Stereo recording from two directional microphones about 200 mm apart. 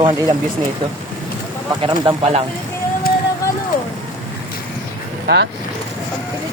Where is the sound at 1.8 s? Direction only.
25° right (ahead or behind).